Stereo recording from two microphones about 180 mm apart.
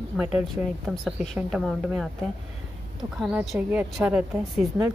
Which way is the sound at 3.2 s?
5° right (ahead or behind).